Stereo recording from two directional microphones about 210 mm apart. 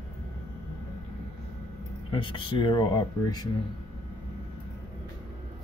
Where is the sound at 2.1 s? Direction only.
25° left (ahead or behind).